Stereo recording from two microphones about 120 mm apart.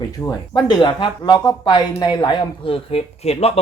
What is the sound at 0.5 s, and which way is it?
Speech, 40° left (ahead or behind).